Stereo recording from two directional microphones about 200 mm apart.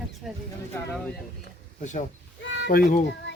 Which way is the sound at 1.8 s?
35° left (ahead or behind).